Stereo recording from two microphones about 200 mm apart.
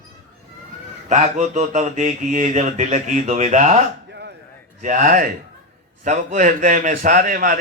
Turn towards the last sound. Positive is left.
turn(degrees=-45)  # may be behind; listen again after turning